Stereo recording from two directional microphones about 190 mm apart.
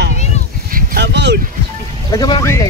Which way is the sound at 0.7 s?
55° right (ahead or behind).